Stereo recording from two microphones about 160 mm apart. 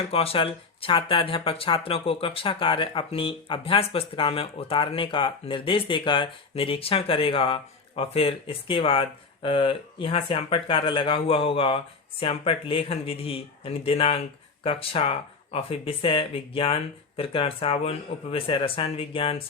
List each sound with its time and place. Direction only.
0.0 s speech: 35° left (ahead or behind)